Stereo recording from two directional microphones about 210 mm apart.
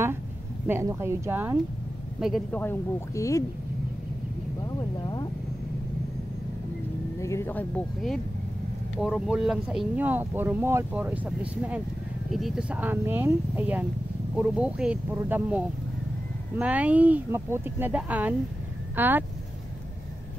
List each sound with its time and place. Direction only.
0.7 s speech: 15° right (ahead or behind)
2.6 s speech: 10° left (ahead or behind)
4.7 s speech: 20° left (ahead or behind)
7.2 s speech: 15° left (ahead or behind); by 19.2 s 10° right (ahead or behind)